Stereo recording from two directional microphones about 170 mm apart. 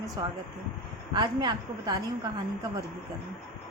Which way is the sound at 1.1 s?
25° right (ahead or behind).